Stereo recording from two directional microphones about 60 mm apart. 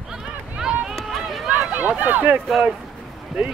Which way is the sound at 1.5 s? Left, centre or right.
Right.